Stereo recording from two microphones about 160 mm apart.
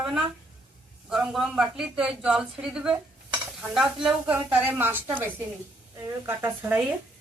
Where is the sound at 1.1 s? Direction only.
5° right (ahead or behind).